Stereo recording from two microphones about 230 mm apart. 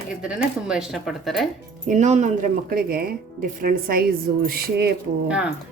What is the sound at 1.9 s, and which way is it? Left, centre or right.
Speech, right.